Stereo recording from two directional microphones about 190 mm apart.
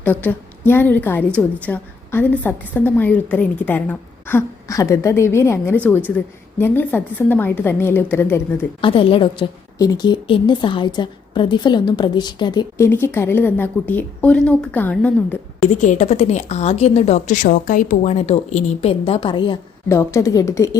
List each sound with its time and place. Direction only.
0.0 s a woman's voice: 10° left (ahead or behind)
8.8 s a woman's voice: 30° left (ahead or behind); by 15.4 s 10° left (ahead or behind)
15.7 s a woman's voice: 35° left (ahead or behind)
19.9 s a woman's voice: 15° left (ahead or behind)